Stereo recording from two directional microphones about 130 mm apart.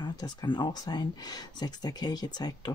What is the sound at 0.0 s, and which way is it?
Speech, 30° left (ahead or behind).